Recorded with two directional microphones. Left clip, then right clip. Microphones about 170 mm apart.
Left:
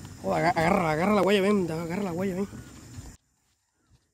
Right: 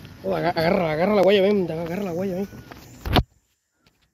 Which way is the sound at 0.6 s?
30° left (ahead or behind).